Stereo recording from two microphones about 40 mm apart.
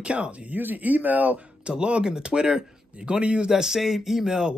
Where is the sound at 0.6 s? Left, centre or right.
Right.